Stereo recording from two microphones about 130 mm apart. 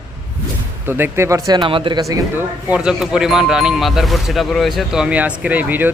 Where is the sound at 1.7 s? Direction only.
40° right (ahead or behind).